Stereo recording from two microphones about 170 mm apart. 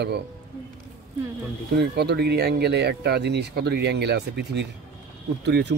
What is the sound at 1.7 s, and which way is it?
Speech, 75° right (ahead or behind).